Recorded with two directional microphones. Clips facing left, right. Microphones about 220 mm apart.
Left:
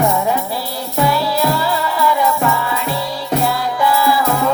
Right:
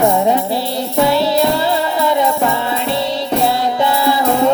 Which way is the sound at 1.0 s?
25° right (ahead or behind).